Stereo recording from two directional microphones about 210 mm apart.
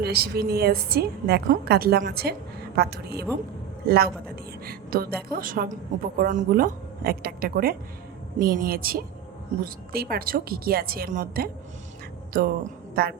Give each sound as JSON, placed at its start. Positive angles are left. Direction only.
{"t": 0.0, "sound": "a woman's voice", "side_deg": -50}